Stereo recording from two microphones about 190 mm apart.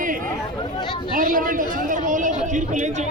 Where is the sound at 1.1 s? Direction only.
45° right (ahead or behind).